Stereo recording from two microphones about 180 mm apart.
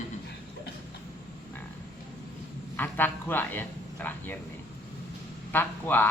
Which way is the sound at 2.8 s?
10° left (ahead or behind).